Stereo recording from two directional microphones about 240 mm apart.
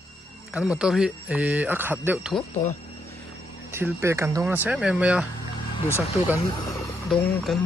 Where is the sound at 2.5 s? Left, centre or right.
Left.